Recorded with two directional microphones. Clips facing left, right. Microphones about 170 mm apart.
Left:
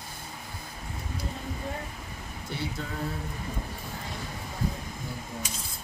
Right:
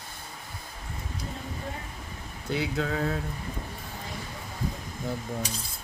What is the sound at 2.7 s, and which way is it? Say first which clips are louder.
Speech: right 6 dB; 70° right (ahead or behind).